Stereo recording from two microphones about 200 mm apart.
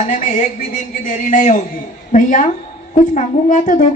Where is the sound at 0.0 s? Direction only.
40° left (ahead or behind).